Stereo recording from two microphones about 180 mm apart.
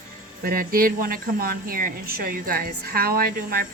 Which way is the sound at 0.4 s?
55° right (ahead or behind).